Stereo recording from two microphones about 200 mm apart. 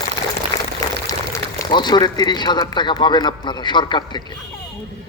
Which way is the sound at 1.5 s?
20° left (ahead or behind).